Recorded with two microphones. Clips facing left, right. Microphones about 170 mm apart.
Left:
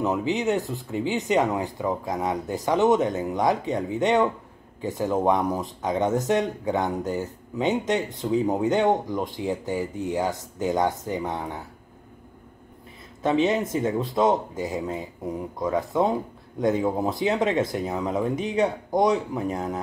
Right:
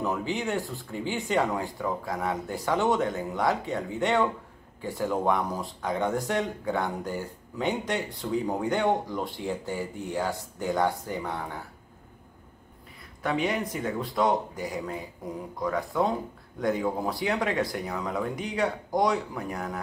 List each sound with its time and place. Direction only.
0.0 s speech: 20° left (ahead or behind)
13.2 s speech: 25° left (ahead or behind)